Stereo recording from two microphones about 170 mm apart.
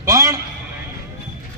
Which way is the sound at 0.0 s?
20° right (ahead or behind).